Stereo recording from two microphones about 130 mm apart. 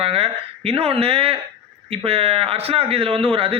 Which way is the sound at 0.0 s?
50° right (ahead or behind).